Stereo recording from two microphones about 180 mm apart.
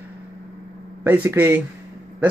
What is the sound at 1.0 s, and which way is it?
Speech, 10° right (ahead or behind).